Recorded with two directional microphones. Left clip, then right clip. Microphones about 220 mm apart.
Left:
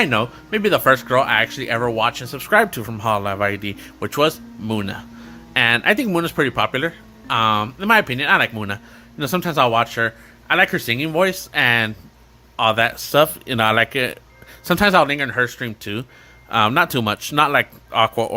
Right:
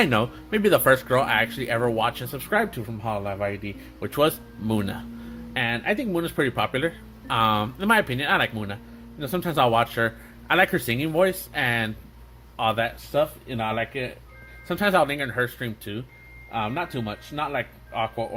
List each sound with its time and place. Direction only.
0.0 s speech: 5° left (ahead or behind)
5.5 s speech: 25° left (ahead or behind)
13.1 s a man's voice: 40° left (ahead or behind)
14.7 s speech: 25° left (ahead or behind)
16.5 s a man's voice: 40° left (ahead or behind)